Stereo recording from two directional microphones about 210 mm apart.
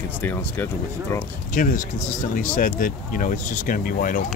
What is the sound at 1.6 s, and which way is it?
Speech, 40° left (ahead or behind).